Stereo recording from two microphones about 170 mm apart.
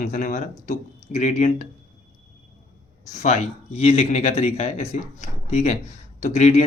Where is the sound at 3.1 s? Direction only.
45° left (ahead or behind).